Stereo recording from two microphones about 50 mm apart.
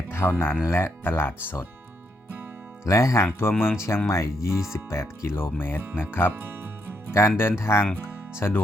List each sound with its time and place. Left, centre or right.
0.3 s speech: left
2.8 s speech: left
3.6 s speech: left
4.1 s speech: left
7.1 s speech: left